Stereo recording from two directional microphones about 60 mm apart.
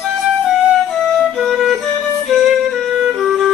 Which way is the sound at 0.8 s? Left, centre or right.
Centre.